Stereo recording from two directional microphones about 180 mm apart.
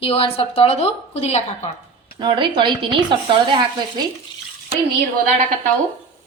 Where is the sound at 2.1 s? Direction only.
25° right (ahead or behind).